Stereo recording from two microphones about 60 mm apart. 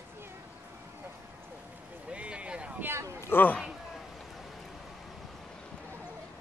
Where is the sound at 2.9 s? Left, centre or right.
Right.